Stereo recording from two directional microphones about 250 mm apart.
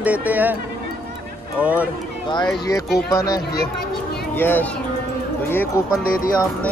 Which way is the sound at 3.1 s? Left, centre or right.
Centre.